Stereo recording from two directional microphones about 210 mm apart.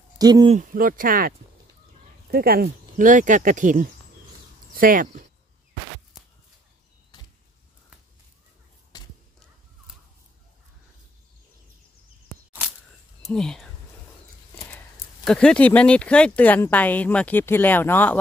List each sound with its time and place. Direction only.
0.2 s speech: 20° right (ahead or behind)
0.6 s speech: 40° right (ahead or behind)
2.3 s speech: 45° right (ahead or behind)
8.9 s a sound: 20° left (ahead or behind)
12.6 s a sound: 5° right (ahead or behind)
13.2 s speech: centre (ahead or behind)
15.2 s speech: 5° left (ahead or behind)